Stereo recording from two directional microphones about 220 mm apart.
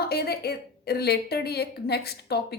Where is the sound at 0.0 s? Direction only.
45° left (ahead or behind).